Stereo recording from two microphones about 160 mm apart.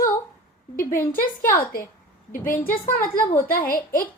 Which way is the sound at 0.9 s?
60° left (ahead or behind).